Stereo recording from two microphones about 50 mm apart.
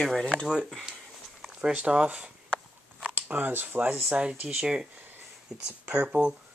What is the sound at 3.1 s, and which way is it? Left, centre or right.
Speech, right.